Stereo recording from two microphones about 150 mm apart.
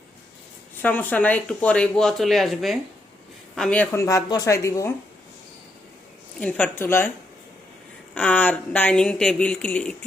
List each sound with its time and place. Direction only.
0.8 s a man's voice: 10° left (ahead or behind)
3.9 s speech: 20° left (ahead or behind)
6.4 s speech: 10° left (ahead or behind)
8.1 s speech: 10° left (ahead or behind)